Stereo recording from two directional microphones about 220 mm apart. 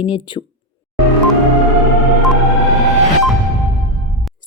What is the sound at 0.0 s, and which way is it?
Speech, 20° left (ahead or behind).